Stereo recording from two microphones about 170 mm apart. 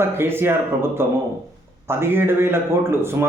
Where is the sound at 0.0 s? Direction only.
15° right (ahead or behind).